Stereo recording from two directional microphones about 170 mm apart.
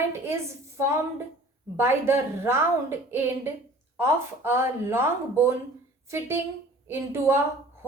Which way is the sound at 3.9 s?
15° right (ahead or behind).